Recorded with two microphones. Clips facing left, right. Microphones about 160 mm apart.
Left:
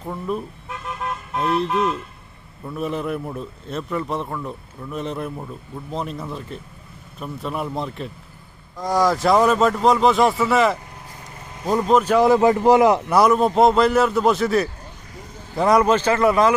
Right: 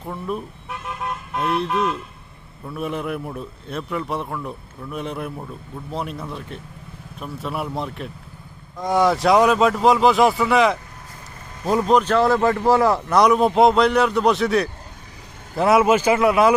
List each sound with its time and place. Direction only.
0.0 s a man's voice: centre (ahead or behind)
12.0 s a man's voice: 10° left (ahead or behind)
13.1 s a man's voice: centre (ahead or behind)